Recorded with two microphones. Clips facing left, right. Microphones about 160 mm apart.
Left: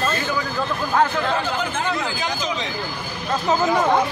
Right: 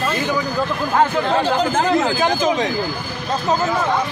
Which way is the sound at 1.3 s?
35° right (ahead or behind).